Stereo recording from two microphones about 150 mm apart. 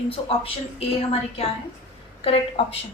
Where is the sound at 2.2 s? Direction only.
40° left (ahead or behind).